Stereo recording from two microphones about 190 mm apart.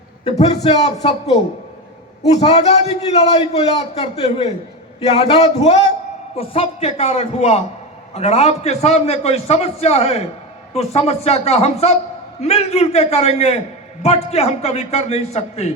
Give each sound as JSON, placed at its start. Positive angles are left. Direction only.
{"t": 0.3, "sound": "a man's voice", "side_deg": 35}
{"t": 2.2, "sound": "a man's voice", "side_deg": 35}